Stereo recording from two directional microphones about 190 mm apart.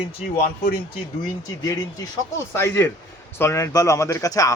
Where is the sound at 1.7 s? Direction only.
15° left (ahead or behind).